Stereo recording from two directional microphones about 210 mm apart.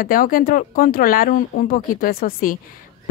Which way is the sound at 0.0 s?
40° left (ahead or behind).